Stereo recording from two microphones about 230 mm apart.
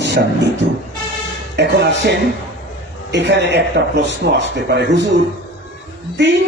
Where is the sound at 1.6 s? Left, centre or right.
Right.